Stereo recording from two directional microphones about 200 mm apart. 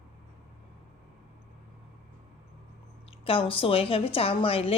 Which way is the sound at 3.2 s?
25° left (ahead or behind).